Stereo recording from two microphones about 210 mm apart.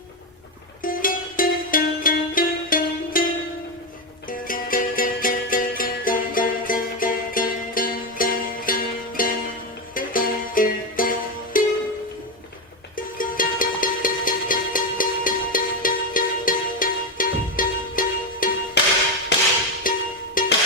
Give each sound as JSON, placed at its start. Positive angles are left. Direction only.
{"t": 0.8, "sound": "music", "side_deg": 40}
{"t": 4.3, "sound": "music", "side_deg": 40}
{"t": 13.0, "sound": "music", "side_deg": 40}
{"t": 19.9, "sound": "music", "side_deg": 40}